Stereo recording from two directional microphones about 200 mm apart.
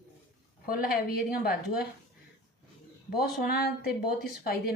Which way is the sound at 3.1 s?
50° left (ahead or behind).